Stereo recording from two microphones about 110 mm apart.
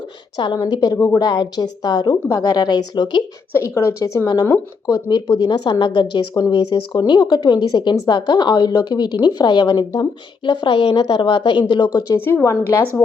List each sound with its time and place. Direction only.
0.3 s a woman's voice: 40° left (ahead or behind)
0.9 s a woman's voice: 25° left (ahead or behind)
1.2 s a woman's voice: 40° left (ahead or behind)
3.8 s a woman's voice: 30° left (ahead or behind); by 11.9 s 45° left (ahead or behind)
12.3 s a woman's voice: 25° left (ahead or behind)